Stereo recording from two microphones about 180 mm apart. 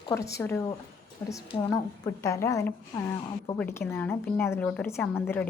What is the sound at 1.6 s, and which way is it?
A woman's voice, 15° left (ahead or behind).